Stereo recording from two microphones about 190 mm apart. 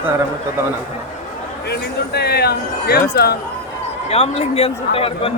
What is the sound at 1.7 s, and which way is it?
Speech, 60° left (ahead or behind).